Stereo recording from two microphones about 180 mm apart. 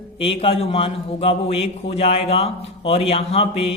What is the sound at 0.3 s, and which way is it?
A man's voice, 30° left (ahead or behind).